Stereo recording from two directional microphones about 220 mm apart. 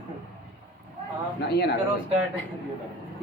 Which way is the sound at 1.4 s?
50° left (ahead or behind).